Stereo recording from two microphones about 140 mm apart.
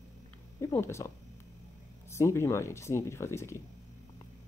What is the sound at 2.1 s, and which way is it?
Speech, 20° left (ahead or behind).